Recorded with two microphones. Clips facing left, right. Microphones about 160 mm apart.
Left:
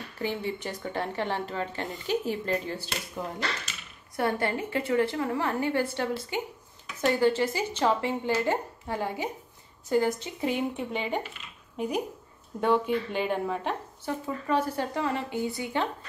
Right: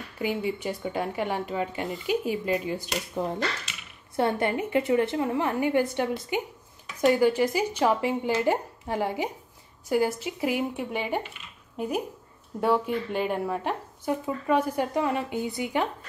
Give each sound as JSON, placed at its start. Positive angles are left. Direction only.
{"t": 0.2, "sound": "a woman's voice", "side_deg": -10}
{"t": 12.5, "sound": "speech", "side_deg": -5}